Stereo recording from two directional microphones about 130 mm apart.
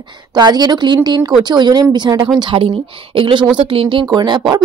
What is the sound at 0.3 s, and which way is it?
Speech, 30° right (ahead or behind).